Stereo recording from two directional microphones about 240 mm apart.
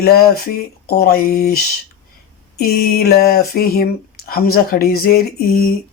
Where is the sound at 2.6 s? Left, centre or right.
Left.